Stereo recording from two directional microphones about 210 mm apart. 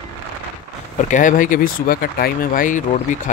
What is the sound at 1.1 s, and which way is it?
Speech, 40° left (ahead or behind).